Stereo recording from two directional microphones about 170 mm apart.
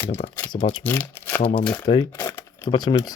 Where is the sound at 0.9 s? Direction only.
10° left (ahead or behind).